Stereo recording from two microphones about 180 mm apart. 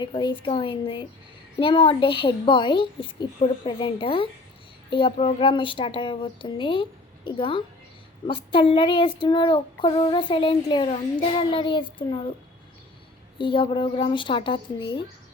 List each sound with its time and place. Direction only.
0.0 s a woman's voice: 25° left (ahead or behind)
13.4 s a woman's voice: 30° left (ahead or behind)